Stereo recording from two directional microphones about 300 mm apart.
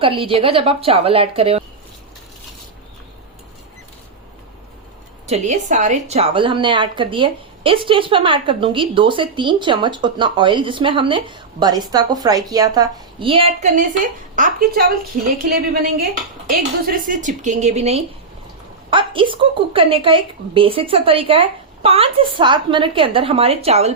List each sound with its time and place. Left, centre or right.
0.0 s a woman's voice: centre
5.2 s a woman's voice: right
16.5 s a woman's voice: right